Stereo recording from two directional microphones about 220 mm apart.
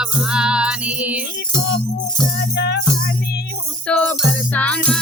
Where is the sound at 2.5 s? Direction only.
50° left (ahead or behind).